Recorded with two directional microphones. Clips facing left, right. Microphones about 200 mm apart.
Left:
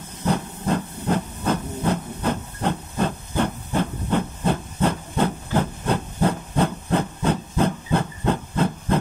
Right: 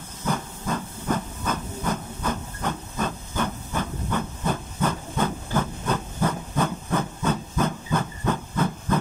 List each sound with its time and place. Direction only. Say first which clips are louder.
0.2 s hiss: left 4 dB; 35° left (ahead or behind)